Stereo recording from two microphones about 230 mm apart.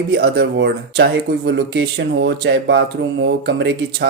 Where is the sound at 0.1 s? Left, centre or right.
Right.